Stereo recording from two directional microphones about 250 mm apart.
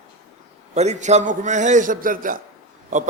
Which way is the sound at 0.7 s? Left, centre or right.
Right.